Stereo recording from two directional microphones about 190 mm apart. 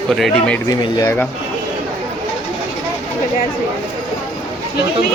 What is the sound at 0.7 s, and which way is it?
Speech, 20° left (ahead or behind).